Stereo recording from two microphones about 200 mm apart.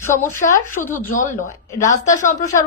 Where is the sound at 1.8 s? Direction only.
40° left (ahead or behind).